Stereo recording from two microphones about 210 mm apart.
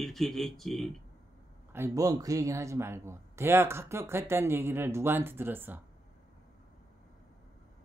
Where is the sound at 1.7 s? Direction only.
15° right (ahead or behind).